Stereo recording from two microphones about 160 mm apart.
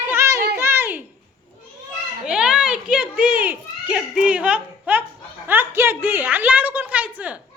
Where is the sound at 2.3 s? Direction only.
5° right (ahead or behind).